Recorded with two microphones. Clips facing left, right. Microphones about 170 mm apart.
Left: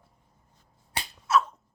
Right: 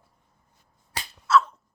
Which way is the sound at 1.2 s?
15° left (ahead or behind).